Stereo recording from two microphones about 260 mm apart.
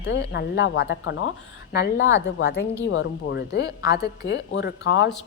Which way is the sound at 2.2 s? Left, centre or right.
Left.